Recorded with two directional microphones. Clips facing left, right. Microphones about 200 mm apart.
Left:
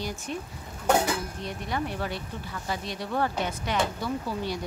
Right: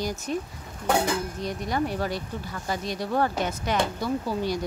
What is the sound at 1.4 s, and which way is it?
Speech, 40° right (ahead or behind).